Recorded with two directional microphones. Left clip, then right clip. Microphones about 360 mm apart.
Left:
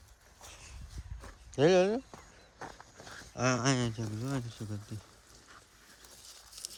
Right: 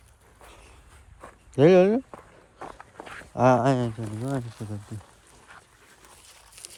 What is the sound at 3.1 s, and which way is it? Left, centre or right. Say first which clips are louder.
Speech: right 12 dB; centre.